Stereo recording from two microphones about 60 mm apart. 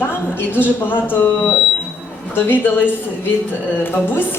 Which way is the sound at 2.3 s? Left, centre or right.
Left.